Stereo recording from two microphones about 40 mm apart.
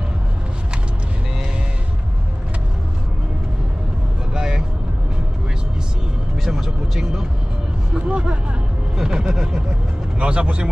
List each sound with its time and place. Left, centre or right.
4.3 s vehicle: centre
6.4 s music: centre
7.9 s vehicle: right
10.1 s vehicle: right